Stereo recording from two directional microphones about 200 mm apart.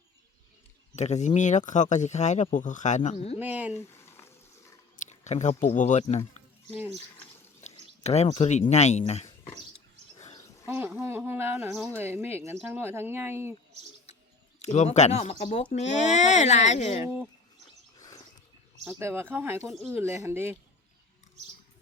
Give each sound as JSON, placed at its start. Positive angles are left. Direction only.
{"t": 0.9, "sound": "speech", "side_deg": 35}
{"t": 3.3, "sound": "speech", "side_deg": -10}
{"t": 3.8, "sound": "a sound", "side_deg": 10}
{"t": 5.0, "sound": "speech", "side_deg": 35}
{"t": 7.6, "sound": "speech", "side_deg": 35}
{"t": 10.2, "sound": "a sound", "side_deg": 35}
{"t": 10.7, "sound": "speech", "side_deg": -10}
{"t": 12.0, "sound": "speech", "side_deg": -10}
{"t": 14.6, "sound": "speech", "side_deg": 35}
{"t": 18.9, "sound": "speech", "side_deg": -10}
{"t": 19.6, "sound": "speech", "side_deg": 0}
{"t": 19.9, "sound": "speech", "side_deg": -10}